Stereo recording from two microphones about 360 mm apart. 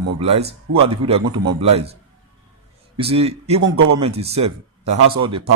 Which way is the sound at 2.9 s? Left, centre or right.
Centre.